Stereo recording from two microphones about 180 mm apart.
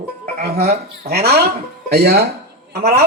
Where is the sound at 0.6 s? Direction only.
60° right (ahead or behind).